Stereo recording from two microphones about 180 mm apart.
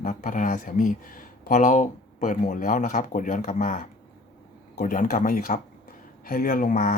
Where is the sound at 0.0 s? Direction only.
45° left (ahead or behind).